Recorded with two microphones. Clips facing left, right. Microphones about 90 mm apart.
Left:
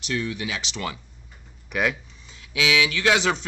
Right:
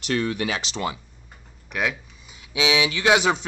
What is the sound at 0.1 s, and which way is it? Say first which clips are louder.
Speech: right 4 dB; 55° right (ahead or behind).